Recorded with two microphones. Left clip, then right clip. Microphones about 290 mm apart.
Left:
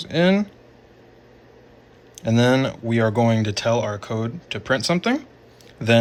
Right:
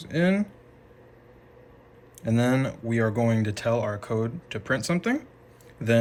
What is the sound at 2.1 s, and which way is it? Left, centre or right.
Speech, centre.